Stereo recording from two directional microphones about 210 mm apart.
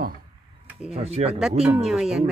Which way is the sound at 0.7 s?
5° right (ahead or behind).